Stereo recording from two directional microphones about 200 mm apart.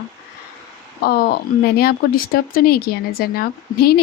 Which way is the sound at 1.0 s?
50° left (ahead or behind).